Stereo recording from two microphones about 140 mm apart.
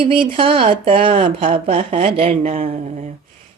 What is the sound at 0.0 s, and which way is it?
Speech, 40° right (ahead or behind).